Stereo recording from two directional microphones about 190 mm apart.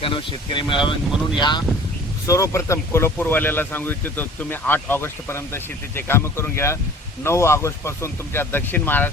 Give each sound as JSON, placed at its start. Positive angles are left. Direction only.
{"t": 0.0, "sound": "speech", "side_deg": 25}